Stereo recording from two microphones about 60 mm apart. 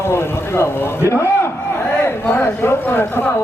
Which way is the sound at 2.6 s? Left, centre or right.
Left.